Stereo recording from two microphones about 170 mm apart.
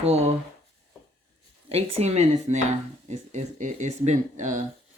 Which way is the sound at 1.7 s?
35° right (ahead or behind).